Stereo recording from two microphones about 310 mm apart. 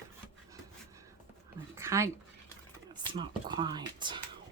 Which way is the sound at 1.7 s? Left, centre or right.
Centre.